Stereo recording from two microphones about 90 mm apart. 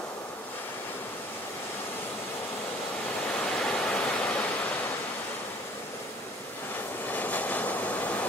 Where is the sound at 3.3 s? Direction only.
10° left (ahead or behind).